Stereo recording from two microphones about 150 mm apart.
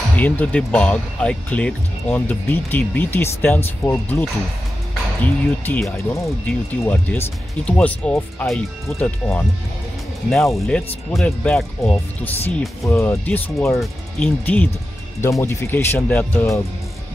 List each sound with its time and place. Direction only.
0.1 s speech: 10° left (ahead or behind)
5.2 s speech: 10° left (ahead or behind)